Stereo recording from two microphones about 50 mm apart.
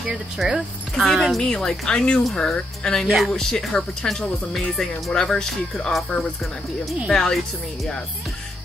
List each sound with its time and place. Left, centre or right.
0.1 s speech: centre
1.4 s speech: centre